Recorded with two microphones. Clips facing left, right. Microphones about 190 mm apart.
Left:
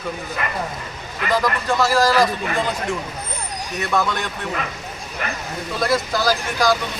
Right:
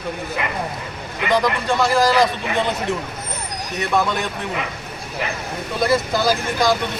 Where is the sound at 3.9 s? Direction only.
Centre (ahead or behind).